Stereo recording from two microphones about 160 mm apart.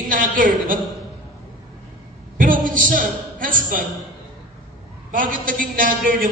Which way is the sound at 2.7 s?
55° right (ahead or behind).